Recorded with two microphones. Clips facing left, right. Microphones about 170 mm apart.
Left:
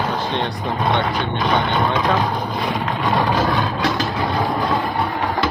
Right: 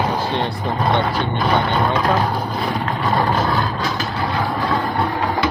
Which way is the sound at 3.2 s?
10° left (ahead or behind).